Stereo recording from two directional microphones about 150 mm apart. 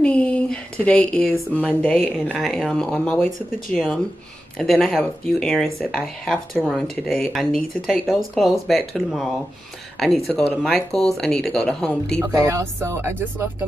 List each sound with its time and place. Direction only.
0.0 s a sound: 10° left (ahead or behind)
1.7 s speech: 10° left (ahead or behind)
12.2 s speech: 20° right (ahead or behind)